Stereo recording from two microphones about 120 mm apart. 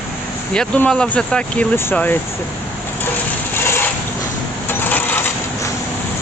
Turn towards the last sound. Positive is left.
turn(degrees=15)  # may be behind; listen again after turning